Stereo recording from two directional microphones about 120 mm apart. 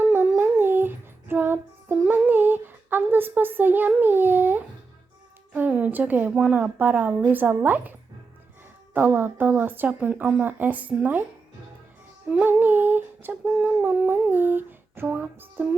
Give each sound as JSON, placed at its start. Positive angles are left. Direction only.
{"t": 0.0, "sound": "child singing", "side_deg": -15}
{"t": 5.5, "sound": "humming", "side_deg": -10}
{"t": 12.3, "sound": "humming", "side_deg": -15}